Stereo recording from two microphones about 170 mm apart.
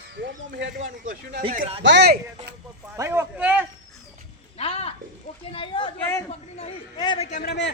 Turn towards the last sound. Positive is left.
turn(degrees=85)